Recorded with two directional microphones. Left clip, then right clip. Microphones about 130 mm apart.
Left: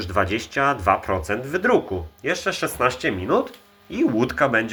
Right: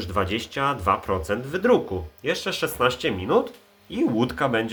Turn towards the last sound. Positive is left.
turn(degrees=-10)  # may be behind; listen again after turning